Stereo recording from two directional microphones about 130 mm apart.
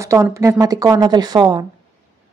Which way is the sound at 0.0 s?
25° right (ahead or behind).